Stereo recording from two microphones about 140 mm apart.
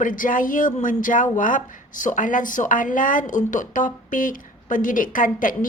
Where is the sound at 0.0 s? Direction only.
75° left (ahead or behind).